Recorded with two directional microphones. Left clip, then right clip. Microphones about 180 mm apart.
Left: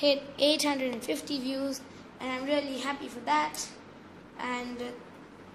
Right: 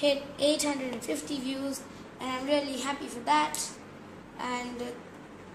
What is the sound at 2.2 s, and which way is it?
Child singing, 10° left (ahead or behind).